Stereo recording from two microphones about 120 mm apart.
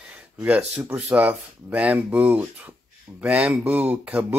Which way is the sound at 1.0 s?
10° right (ahead or behind).